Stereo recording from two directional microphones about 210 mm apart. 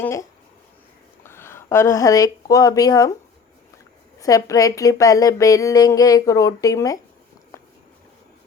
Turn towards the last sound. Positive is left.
turn(degrees=15)  # may be behind; listen again after turning